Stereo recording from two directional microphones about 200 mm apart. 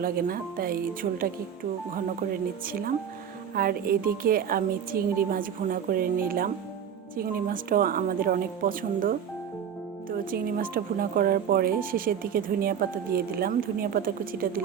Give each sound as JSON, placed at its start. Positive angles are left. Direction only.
{"t": 0.0, "sound": "a woman's voice", "side_deg": -45}
{"t": 3.5, "sound": "speech", "side_deg": -50}